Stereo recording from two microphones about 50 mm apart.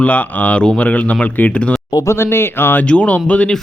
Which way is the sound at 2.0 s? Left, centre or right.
Left.